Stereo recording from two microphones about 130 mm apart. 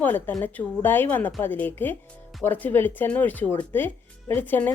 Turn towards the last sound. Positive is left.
turn(degrees=15)  # may be behind; listen again after turning